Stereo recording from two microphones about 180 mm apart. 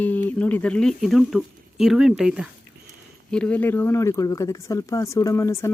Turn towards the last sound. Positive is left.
turn(degrees=15)  # may be behind; listen again after turning